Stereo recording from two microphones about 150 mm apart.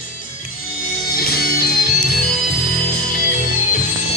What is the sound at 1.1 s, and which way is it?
Music, 80° left.